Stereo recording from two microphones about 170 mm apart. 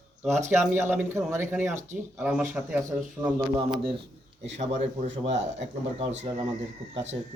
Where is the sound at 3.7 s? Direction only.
30° right (ahead or behind).